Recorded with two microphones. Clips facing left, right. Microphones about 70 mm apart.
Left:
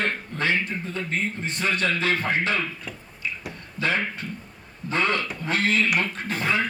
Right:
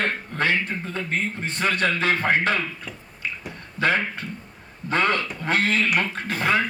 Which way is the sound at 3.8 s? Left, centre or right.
Right.